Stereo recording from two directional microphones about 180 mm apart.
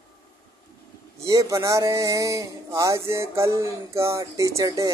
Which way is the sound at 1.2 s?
20° right (ahead or behind).